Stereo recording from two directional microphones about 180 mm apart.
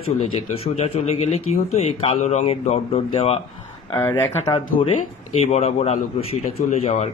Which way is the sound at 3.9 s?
15° left (ahead or behind).